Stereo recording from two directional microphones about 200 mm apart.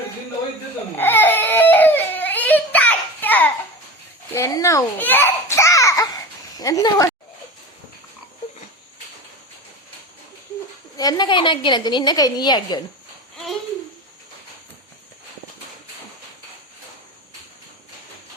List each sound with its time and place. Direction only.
0.9 s baby cry: 10° left (ahead or behind)
4.4 s a sound: 15° left (ahead or behind)
6.6 s a woman's voice: 20° left (ahead or behind)
10.9 s a woman's voice: 20° left (ahead or behind)